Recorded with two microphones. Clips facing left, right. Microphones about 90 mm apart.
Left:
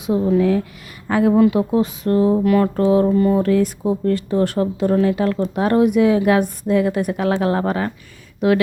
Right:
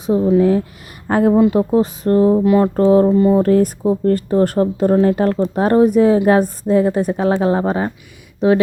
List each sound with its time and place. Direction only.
0.3 s speech: 30° right (ahead or behind)
3.4 s speech: 40° right (ahead or behind)